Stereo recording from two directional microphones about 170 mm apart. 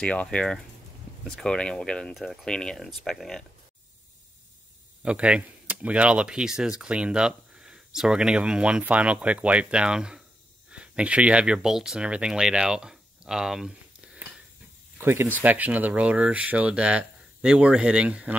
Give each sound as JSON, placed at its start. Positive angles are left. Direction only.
{"t": 0.0, "sound": "speech", "side_deg": 5}
{"t": 5.0, "sound": "speech", "side_deg": -5}